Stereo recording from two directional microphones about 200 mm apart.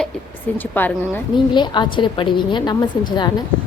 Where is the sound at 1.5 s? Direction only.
20° left (ahead or behind).